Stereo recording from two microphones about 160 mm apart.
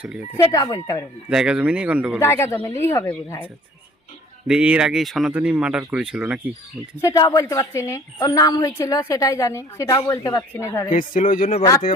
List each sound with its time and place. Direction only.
0.3 s a woman's voice: 25° left (ahead or behind)
1.3 s speech: 5° right (ahead or behind)
2.1 s a woman's voice: 15° left (ahead or behind)
4.4 s speech: 5° right (ahead or behind)
6.9 s a woman's voice: 20° left (ahead or behind)
10.9 s speech: 60° left (ahead or behind)
11.6 s a woman's voice: 30° left (ahead or behind)